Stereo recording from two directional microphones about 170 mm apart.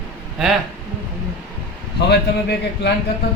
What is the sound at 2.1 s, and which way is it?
Speech, 75° left (ahead or behind).